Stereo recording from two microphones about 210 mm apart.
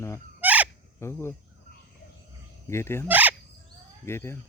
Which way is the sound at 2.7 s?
10° left (ahead or behind).